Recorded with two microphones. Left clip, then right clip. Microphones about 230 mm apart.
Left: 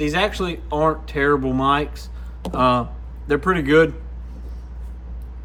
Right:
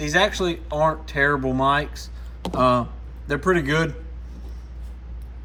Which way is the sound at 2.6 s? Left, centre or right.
Centre.